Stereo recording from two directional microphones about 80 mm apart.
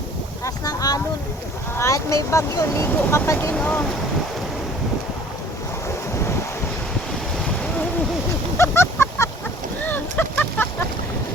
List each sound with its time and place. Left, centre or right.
0.4 s boat: left
1.8 s speech: left
3.5 s speech: centre
8.5 s a sound: left
9.8 s boat: left